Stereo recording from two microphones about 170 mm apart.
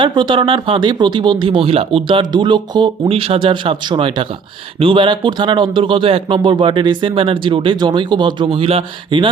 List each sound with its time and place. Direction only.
0.0 s a man's voice: 30° right (ahead or behind)